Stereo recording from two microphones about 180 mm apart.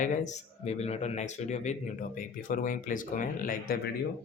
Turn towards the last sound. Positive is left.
turn(degrees=50)  # may be behind; listen again after turning